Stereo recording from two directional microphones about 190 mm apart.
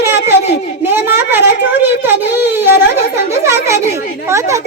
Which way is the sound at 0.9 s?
10° right (ahead or behind).